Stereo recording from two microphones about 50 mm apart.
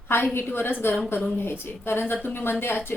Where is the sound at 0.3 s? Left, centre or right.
Left.